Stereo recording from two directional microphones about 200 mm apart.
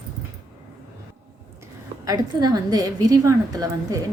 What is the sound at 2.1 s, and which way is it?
A woman's voice, 20° right (ahead or behind).